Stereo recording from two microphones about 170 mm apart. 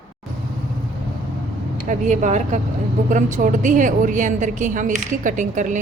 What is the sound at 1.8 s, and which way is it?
A woman's voice, 45° right (ahead or behind).